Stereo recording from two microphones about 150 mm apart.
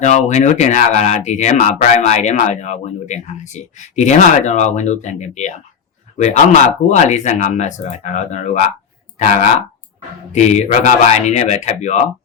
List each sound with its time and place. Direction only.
0.0 s speech: 55° left (ahead or behind)